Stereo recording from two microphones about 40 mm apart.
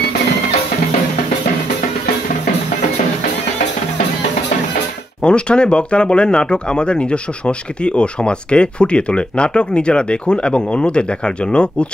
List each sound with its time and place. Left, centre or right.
5.2 s speech: left